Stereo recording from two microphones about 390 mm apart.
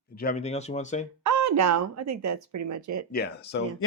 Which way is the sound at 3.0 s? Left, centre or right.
Left.